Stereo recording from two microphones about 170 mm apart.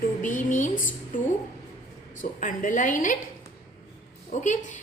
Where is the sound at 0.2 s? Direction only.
50° left (ahead or behind).